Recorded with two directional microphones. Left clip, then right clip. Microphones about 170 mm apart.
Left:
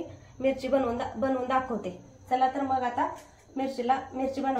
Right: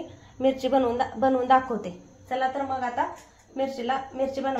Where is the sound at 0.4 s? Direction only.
35° right (ahead or behind).